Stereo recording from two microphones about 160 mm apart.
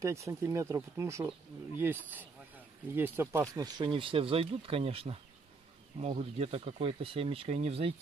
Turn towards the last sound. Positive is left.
turn(degrees=-40)  # may be behind; listen again after turning